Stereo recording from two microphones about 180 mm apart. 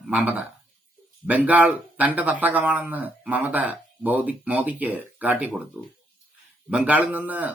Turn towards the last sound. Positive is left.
turn(degrees=-10)  # may be behind; listen again after turning